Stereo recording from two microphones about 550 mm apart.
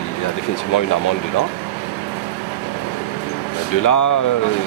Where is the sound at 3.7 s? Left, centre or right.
Left.